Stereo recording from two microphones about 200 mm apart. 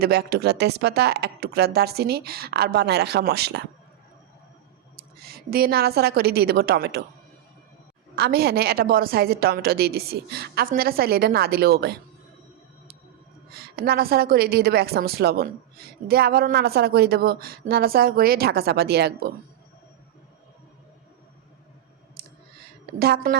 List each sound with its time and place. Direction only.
0.0 s a woman's voice: 50° right (ahead or behind)
4.9 s a woman's voice: 50° right (ahead or behind)
8.1 s a woman's voice: 50° right (ahead or behind)
13.5 s a woman's voice: 50° right (ahead or behind)
22.2 s clicking: 50° right (ahead or behind)
23.0 s a woman's voice: 50° right (ahead or behind)